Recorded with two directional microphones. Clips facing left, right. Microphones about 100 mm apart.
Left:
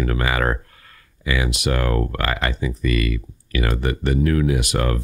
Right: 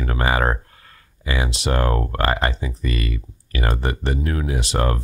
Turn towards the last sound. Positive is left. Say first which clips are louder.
# left 1 dB
turn(degrees=-30)  # may be behind; listen again after turning